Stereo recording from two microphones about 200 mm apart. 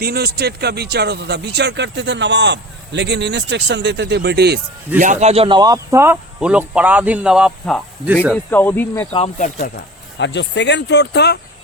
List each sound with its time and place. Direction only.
0.0 s speech: 50° right (ahead or behind)
4.9 s speech: 40° right (ahead or behind); by 8.4 s 5° right (ahead or behind)
8.4 s speech: 10° left (ahead or behind)
9.4 s speech: 45° left (ahead or behind)
10.2 s speech: 60° left (ahead or behind)